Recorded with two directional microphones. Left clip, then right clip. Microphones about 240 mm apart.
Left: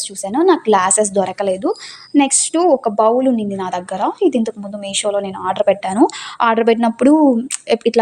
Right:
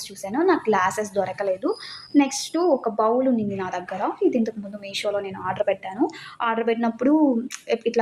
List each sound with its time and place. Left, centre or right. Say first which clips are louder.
0.3 s a woman's voice: left 7 dB; left